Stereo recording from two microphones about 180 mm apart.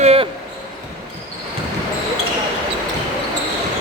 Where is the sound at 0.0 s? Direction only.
35° right (ahead or behind).